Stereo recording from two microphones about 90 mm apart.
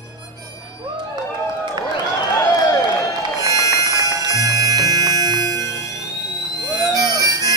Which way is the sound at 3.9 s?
40° right (ahead or behind).